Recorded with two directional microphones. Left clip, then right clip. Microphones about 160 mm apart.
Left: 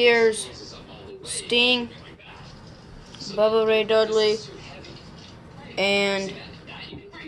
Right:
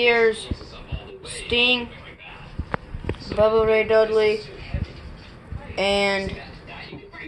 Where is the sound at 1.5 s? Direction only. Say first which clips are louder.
Right 1 dB; 30° left (ahead or behind).